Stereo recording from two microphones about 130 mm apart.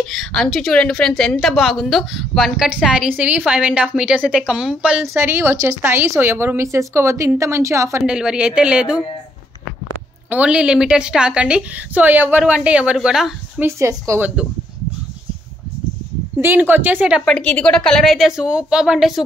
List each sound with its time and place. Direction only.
0.0 s a woman's voice: centre (ahead or behind)
5.0 s a woman's voice: 20° right (ahead or behind)
8.0 s a woman's voice: 5° right (ahead or behind)
10.3 s a woman's voice: 10° right (ahead or behind)
13.7 s a woman's voice: 20° right (ahead or behind)
16.3 s a woman's voice: 15° right (ahead or behind)
17.2 s a woman's voice: 5° left (ahead or behind)